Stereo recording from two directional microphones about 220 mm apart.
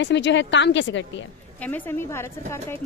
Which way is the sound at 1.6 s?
5° left (ahead or behind).